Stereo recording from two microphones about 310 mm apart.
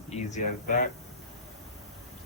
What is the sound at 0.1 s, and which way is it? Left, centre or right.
Speech, left.